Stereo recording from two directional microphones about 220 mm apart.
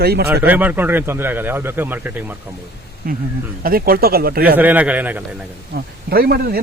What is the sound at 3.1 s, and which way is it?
Speech, 40° right (ahead or behind).